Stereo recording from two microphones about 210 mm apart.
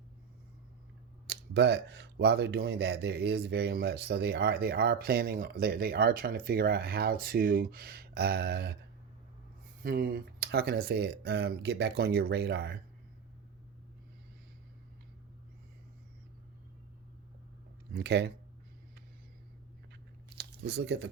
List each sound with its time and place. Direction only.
1.3 s speech: 55° right (ahead or behind)
9.8 s speech: 45° right (ahead or behind)
17.9 s speech: 55° right (ahead or behind)
20.4 s speech: 55° right (ahead or behind)